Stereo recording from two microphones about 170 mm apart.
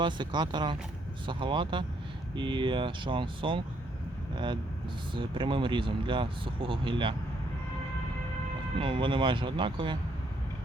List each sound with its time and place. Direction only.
0.0 s speech: 25° right (ahead or behind)
5.1 s speech: 30° right (ahead or behind)
8.8 s speech: 30° right (ahead or behind)